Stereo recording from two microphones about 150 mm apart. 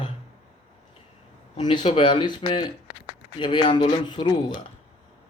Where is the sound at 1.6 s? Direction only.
30° left (ahead or behind).